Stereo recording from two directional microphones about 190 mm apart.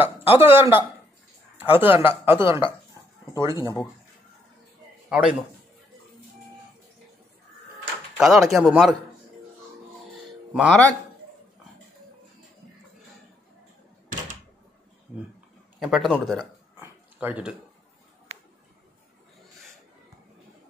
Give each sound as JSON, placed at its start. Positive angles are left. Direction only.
{"t": 0.0, "sound": "speech", "side_deg": -10}
{"t": 5.1, "sound": "a man's voice", "side_deg": -5}
{"t": 8.2, "sound": "a man's voice", "side_deg": 0}
{"t": 10.5, "sound": "a man's voice", "side_deg": -5}
{"t": 15.8, "sound": "a man's voice", "side_deg": 0}